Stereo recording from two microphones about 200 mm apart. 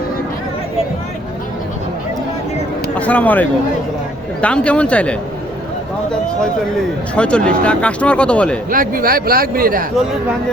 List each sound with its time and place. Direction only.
2.9 s speech: 5° left (ahead or behind)
7.2 s speech: 5° left (ahead or behind)
8.7 s speech: 45° right (ahead or behind)